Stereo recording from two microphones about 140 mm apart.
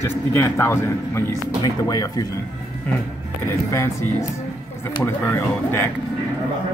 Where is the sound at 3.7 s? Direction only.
20° left (ahead or behind).